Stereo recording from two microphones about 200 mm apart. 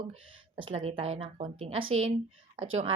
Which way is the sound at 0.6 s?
30° right (ahead or behind).